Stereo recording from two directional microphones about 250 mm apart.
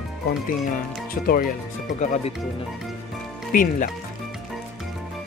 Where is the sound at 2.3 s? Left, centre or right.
Centre.